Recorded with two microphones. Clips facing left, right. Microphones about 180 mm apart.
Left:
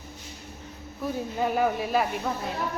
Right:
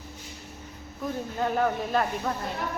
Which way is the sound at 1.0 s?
10° left (ahead or behind).